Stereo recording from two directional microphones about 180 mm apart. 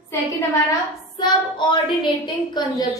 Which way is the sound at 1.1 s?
25° left (ahead or behind).